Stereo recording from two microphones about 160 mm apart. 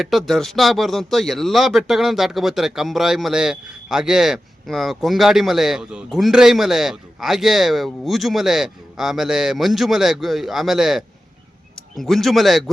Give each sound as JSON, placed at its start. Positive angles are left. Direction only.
{"t": 0.0, "sound": "speech", "side_deg": 0}